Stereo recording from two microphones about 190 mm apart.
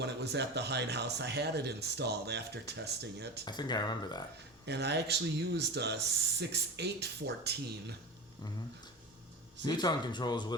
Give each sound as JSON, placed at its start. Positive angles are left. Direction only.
{"t": 0.0, "sound": "speech", "side_deg": -60}
{"t": 3.4, "sound": "speech", "side_deg": 20}
{"t": 4.6, "sound": "speech", "side_deg": -60}
{"t": 9.6, "sound": "speech", "side_deg": 20}